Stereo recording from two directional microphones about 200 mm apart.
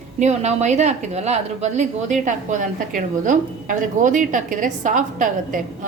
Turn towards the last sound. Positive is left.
turn(degrees=-40)  # may be behind; listen again after turning